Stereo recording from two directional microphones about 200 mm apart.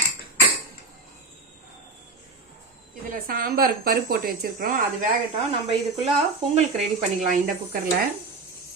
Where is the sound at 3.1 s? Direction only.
45° right (ahead or behind).